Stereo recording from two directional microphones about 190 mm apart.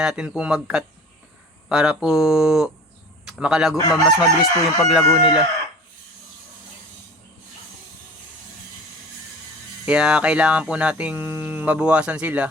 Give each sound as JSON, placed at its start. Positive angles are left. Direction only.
{"t": 0.0, "sound": "a man's voice", "side_deg": -5}
{"t": 3.8, "sound": "chicken", "side_deg": 20}
{"t": 9.8, "sound": "a sound", "side_deg": -5}